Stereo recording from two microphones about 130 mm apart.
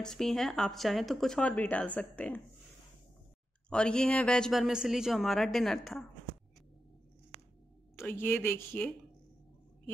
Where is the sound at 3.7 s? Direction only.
5° left (ahead or behind).